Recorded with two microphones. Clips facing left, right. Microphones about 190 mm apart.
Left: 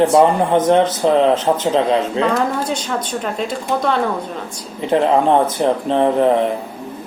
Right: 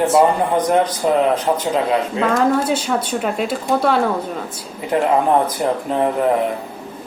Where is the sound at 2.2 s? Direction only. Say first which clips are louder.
Right 1 dB; 5° right (ahead or behind).